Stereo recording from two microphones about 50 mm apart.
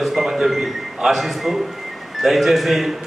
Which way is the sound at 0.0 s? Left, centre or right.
Centre.